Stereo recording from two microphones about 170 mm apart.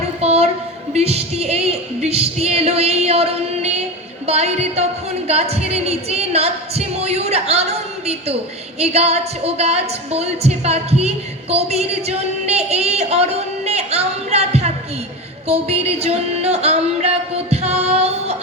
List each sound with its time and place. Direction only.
0.2 s a sound: 35° right (ahead or behind)
0.9 s singing: 40° right (ahead or behind)
8.8 s a woman's voice: 40° right (ahead or behind)
15.4 s music: 40° right (ahead or behind)